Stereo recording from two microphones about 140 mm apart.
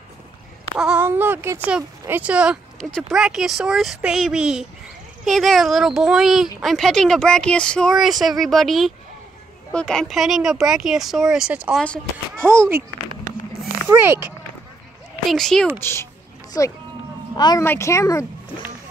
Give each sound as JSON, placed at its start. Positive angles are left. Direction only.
{"t": 0.7, "sound": "speech", "side_deg": -5}
{"t": 11.7, "sound": "speech", "side_deg": 5}
{"t": 12.4, "sound": "speech", "side_deg": -15}
{"t": 13.8, "sound": "speech", "side_deg": -15}
{"t": 15.2, "sound": "speech", "side_deg": 5}
{"t": 15.8, "sound": "speech", "side_deg": 20}
{"t": 17.4, "sound": "speech", "side_deg": 30}
{"t": 17.6, "sound": "speech", "side_deg": 20}